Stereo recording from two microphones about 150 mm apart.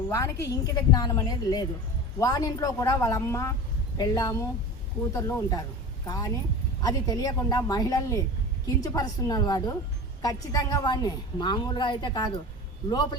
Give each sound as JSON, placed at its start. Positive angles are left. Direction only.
{"t": 0.1, "sound": "a woman's voice", "side_deg": 20}